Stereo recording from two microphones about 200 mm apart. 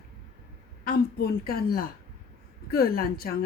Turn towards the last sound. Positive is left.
turn(degrees=50)  # may be behind; listen again after turning